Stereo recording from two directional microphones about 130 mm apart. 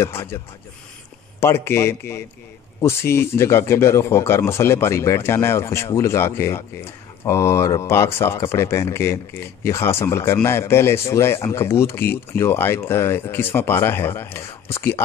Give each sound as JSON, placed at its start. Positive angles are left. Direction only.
{"t": 0.0, "sound": "speech", "side_deg": 20}
{"t": 1.4, "sound": "speech", "side_deg": 20}